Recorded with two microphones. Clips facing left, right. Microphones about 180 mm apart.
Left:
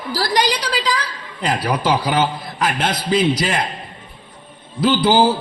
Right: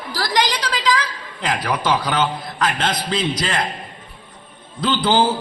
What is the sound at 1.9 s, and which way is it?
A man's voice, 10° left (ahead or behind).